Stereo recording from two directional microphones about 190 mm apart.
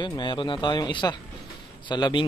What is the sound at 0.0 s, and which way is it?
Speech, 25° left (ahead or behind).